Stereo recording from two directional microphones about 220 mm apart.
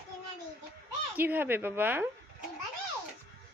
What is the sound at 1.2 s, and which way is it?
Speech, 10° right (ahead or behind).